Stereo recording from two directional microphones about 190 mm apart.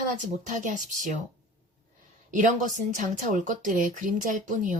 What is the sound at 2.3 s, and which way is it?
A woman's voice, 40° right (ahead or behind).